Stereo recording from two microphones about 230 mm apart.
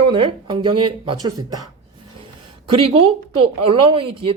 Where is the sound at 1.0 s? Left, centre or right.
Centre.